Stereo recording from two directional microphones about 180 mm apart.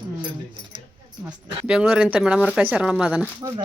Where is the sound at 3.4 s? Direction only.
20° right (ahead or behind).